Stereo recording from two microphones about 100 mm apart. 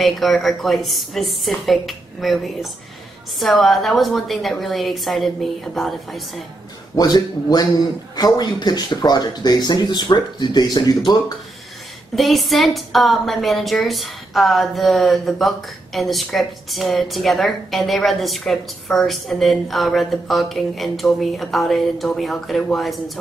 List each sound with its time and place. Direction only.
0.0 s a woman's voice: centre (ahead or behind)
7.0 s speech: 40° left (ahead or behind)
12.2 s a woman's voice: centre (ahead or behind)